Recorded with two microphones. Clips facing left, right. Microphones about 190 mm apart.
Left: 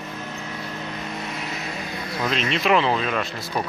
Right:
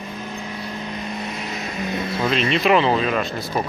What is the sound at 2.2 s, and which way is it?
Speech, centre (ahead or behind).